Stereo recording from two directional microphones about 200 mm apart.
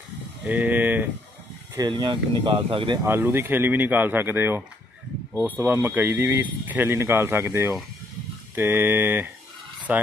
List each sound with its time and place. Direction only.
0.5 s speech: 10° right (ahead or behind)
1.8 s speech: 20° right (ahead or behind)
3.0 s speech: 10° right (ahead or behind)